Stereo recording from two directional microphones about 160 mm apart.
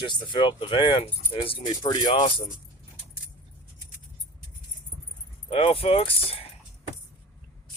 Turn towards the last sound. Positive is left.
turn(degrees=35)  # may be behind; listen again after turning